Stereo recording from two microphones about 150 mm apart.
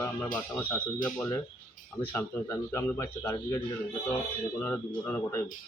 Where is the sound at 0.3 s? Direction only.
10° left (ahead or behind).